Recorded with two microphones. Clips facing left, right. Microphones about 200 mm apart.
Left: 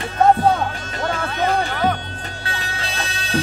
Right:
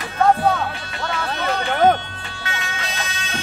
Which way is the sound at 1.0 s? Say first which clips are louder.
Left 3 dB; 45° left (ahead or behind).